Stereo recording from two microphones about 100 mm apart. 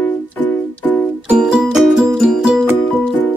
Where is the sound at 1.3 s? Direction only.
10° right (ahead or behind).